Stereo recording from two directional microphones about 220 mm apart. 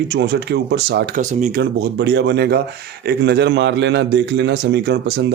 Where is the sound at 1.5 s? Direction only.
50° right (ahead or behind).